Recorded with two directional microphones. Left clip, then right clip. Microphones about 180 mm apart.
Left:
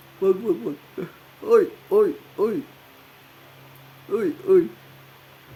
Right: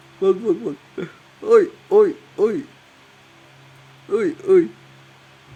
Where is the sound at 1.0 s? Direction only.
10° right (ahead or behind).